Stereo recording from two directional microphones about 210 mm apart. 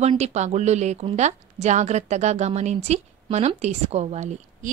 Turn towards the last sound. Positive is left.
turn(degrees=-30)  # may be behind; listen again after turning